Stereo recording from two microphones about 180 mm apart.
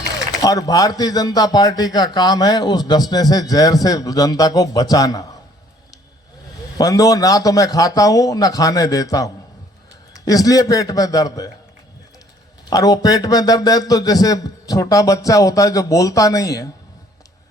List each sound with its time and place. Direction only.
0.4 s speech: 20° left (ahead or behind)
6.7 s speech: 20° left (ahead or behind)
12.7 s speech: 20° left (ahead or behind)